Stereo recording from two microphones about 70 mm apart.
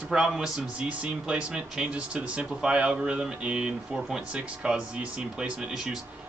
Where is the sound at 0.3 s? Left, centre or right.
Centre.